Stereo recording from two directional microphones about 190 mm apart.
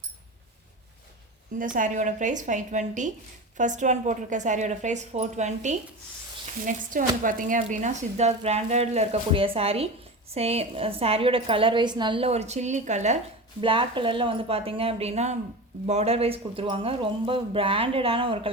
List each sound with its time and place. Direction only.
1.5 s speech: 45° right (ahead or behind)
13.6 s speech: 25° right (ahead or behind)